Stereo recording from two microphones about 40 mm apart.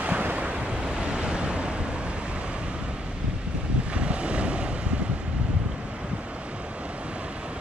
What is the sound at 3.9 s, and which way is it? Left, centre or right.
Wind noise, right.